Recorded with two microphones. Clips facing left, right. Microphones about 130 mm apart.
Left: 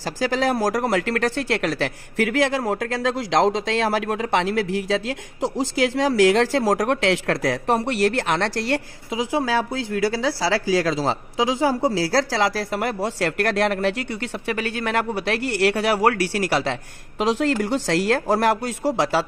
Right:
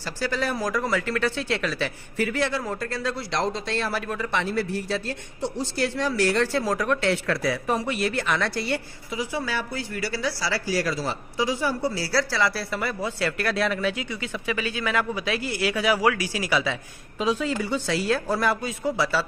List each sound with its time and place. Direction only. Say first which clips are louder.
0.2 s speech: left 6 dB; 90° left; by 15.7 s 70° left (ahead or behind)
15.8 s speech: left 3 dB; 60° left (ahead or behind)
17.2 s speech: left 4 dB; 80° left